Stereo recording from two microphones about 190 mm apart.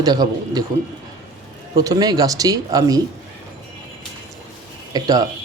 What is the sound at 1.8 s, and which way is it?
Speech, 20° right (ahead or behind).